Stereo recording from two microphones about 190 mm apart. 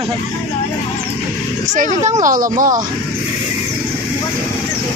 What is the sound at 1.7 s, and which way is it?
Speech, 40° right (ahead or behind).